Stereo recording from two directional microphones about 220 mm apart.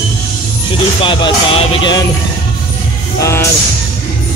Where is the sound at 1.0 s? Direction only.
20° left (ahead or behind).